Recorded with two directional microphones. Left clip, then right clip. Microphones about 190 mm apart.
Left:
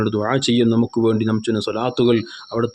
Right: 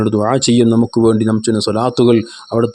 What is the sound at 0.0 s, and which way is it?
Speech, 30° right (ahead or behind).